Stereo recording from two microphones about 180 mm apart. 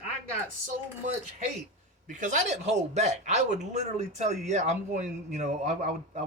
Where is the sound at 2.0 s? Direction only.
45° right (ahead or behind).